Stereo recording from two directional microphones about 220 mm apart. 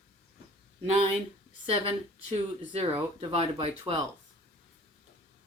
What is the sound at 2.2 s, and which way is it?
Speech, 25° right (ahead or behind).